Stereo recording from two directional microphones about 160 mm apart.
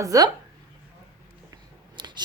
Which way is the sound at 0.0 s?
20° right (ahead or behind).